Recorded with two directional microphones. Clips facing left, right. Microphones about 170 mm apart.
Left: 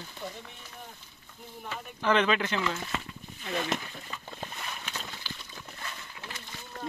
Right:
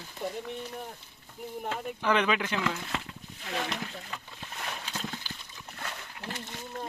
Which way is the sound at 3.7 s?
45° left (ahead or behind).